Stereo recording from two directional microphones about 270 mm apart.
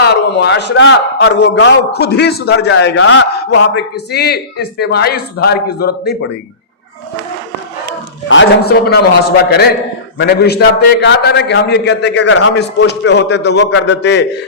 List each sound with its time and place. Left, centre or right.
0.0 s a man's voice: left
8.3 s a man's voice: left